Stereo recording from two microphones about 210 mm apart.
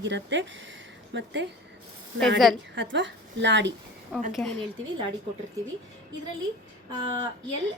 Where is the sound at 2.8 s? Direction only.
60° right (ahead or behind).